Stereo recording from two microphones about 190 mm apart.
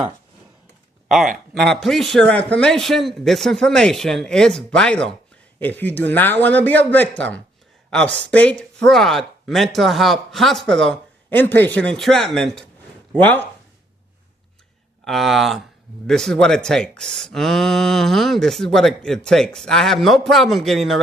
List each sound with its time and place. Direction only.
1.0 s speech: centre (ahead or behind)
15.0 s speech: centre (ahead or behind)